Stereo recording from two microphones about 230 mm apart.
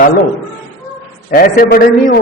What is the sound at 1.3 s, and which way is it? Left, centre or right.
Speech, left.